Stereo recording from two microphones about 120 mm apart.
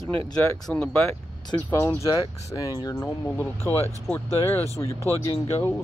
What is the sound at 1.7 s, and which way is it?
Speech, 25° left (ahead or behind).